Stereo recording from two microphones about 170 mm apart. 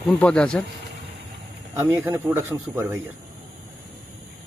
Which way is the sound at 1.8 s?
15° right (ahead or behind).